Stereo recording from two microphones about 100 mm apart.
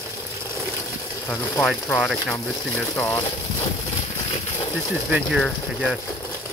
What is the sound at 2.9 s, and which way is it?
Speech, 20° left (ahead or behind).